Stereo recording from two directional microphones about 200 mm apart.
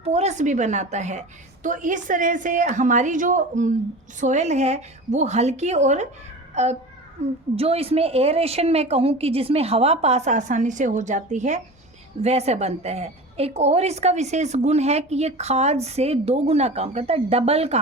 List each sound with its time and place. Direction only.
0.0 s a woman's voice: 30° right (ahead or behind)